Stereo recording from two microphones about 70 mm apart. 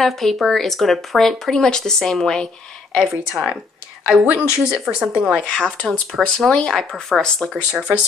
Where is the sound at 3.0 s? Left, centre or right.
Centre.